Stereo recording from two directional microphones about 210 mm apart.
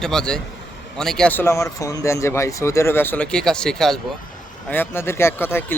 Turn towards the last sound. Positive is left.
turn(degrees=10)  # may be behind; listen again after turning